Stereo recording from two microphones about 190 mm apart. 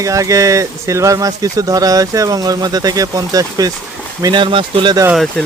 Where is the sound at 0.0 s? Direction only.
15° right (ahead or behind).